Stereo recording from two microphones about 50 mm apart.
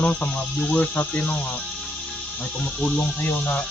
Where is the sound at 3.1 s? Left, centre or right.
Left.